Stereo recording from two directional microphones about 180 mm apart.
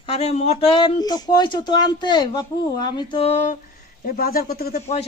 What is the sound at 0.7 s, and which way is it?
Speech, 25° left (ahead or behind).